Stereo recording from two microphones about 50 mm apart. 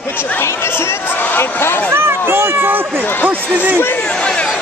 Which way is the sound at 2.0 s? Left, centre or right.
Right.